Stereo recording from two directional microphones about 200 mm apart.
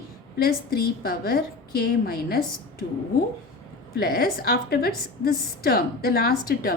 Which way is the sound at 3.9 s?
50° left (ahead or behind).